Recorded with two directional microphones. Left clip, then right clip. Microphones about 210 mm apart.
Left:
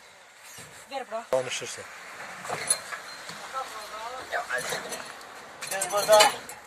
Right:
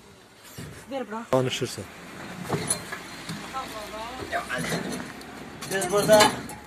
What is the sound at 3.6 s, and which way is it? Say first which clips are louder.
Vehicle: even; 40° right (ahead or behind).